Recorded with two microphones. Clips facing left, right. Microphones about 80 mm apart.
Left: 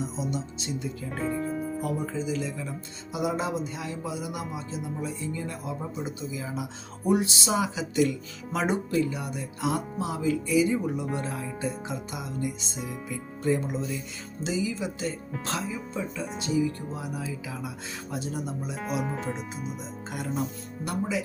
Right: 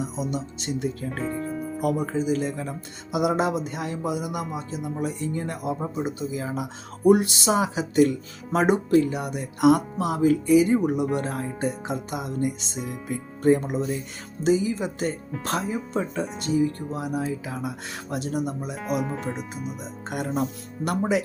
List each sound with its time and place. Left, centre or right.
0.0 s speech: right
1.2 s music: centre
2.1 s speech: right
3.1 s speech: right
11.2 s speech: right
16.4 s speech: right
18.8 s speech: centre
20.1 s speech: right